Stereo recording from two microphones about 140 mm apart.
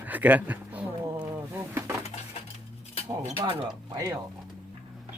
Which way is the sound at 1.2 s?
15° right (ahead or behind).